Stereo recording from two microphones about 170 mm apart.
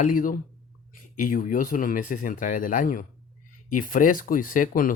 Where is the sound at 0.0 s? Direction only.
50° left (ahead or behind).